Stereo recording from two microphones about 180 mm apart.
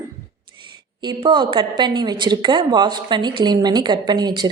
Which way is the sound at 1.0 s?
25° right (ahead or behind).